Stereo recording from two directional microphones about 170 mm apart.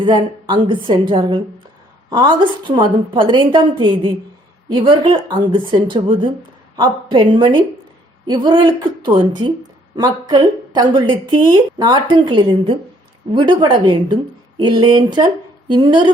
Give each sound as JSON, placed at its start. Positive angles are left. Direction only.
{"t": 0.0, "sound": "a woman's voice", "side_deg": -25}